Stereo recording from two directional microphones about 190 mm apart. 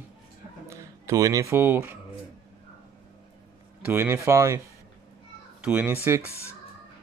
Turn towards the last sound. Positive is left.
turn(degrees=-10)  # may be behind; listen again after turning